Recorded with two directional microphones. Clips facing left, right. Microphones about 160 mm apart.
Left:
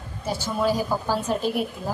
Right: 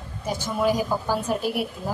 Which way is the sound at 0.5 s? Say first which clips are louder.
Right 1 dB; 15° right (ahead or behind).